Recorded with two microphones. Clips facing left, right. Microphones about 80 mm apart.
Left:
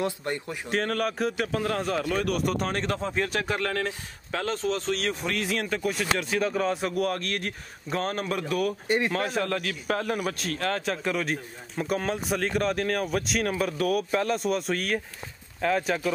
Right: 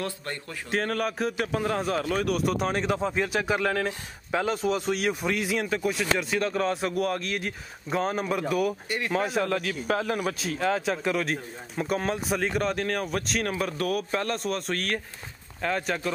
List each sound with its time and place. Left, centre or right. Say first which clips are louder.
0.0 s speech: left 4 dB; centre
0.7 s a man's voice: even; centre
8.8 s speech: left 6 dB; left
9.1 s a man's voice: right 2 dB; centre